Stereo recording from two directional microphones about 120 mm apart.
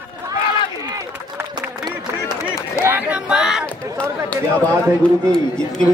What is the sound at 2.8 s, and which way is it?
Speech, 15° right (ahead or behind).